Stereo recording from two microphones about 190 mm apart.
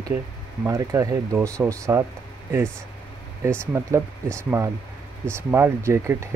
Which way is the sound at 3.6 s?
15° right (ahead or behind).